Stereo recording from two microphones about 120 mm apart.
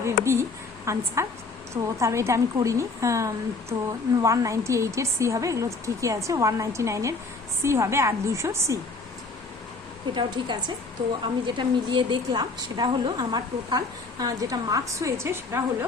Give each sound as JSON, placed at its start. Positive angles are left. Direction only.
{"t": 0.0, "sound": "a sound", "side_deg": -25}
{"t": 0.9, "sound": "a woman's voice", "side_deg": -25}
{"t": 10.2, "sound": "a woman's voice", "side_deg": -40}